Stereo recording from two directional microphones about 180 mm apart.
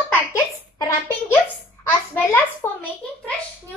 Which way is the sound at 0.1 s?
15° left (ahead or behind).